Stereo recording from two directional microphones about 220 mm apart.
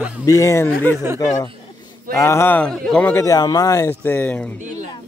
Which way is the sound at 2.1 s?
10° left (ahead or behind).